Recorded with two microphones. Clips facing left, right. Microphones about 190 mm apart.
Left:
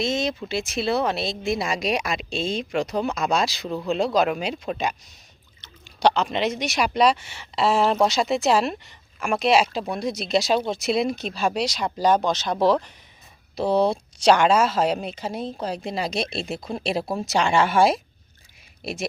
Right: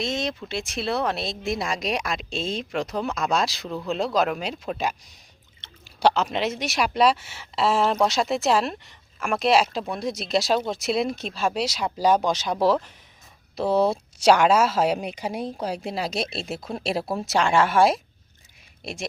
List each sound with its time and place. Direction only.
0.0 s speech: centre (ahead or behind)
5.6 s a sound: 25° right (ahead or behind)
6.0 s speech: 5° right (ahead or behind)